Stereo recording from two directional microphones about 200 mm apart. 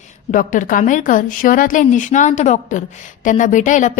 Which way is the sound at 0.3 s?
40° left (ahead or behind).